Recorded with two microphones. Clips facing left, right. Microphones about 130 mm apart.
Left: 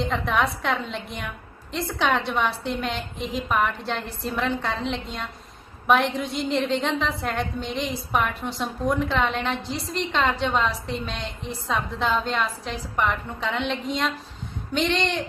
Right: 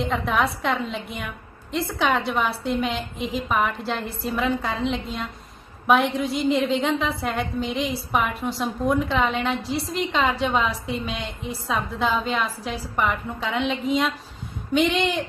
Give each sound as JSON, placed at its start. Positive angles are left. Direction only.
{"t": 0.0, "sound": "a woman's voice", "side_deg": 0}